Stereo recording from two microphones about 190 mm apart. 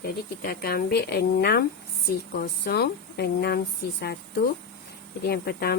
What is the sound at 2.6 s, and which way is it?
Speech, 55° left (ahead or behind).